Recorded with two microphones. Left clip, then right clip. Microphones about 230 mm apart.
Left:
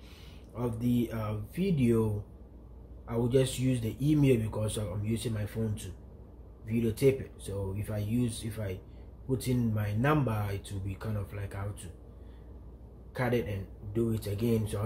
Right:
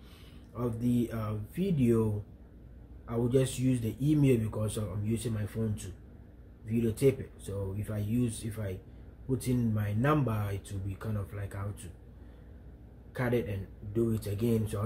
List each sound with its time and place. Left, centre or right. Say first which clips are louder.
0.6 s speech: even; centre
3.1 s speech: left 1 dB; centre
13.1 s speech: left 1 dB; centre